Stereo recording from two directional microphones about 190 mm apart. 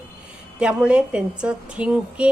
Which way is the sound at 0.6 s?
5° right (ahead or behind).